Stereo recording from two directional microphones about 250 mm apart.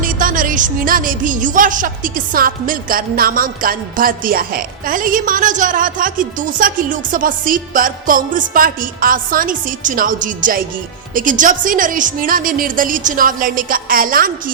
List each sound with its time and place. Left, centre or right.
0.0 s speech: right